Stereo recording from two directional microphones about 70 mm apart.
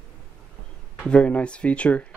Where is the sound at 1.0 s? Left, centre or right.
Centre.